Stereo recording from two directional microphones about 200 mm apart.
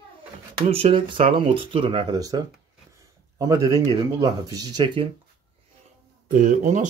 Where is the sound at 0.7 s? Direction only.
30° right (ahead or behind).